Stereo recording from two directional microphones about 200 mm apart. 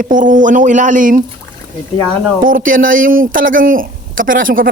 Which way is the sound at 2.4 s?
45° right (ahead or behind).